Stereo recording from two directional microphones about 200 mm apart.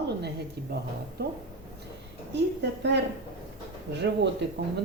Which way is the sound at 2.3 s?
60° right (ahead or behind).